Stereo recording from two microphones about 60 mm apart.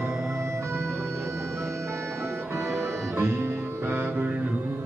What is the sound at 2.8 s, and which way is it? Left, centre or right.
Music, right.